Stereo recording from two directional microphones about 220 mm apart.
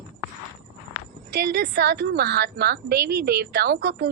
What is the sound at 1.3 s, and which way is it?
A woman's voice, 45° right (ahead or behind).